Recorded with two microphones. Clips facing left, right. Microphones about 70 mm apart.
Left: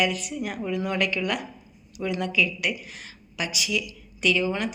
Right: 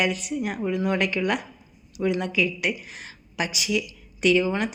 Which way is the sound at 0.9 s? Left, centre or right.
Right.